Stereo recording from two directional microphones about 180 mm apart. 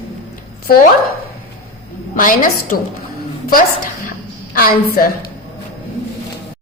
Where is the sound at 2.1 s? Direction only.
50° left (ahead or behind).